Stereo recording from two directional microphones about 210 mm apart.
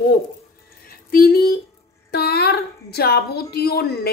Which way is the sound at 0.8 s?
45° left (ahead or behind).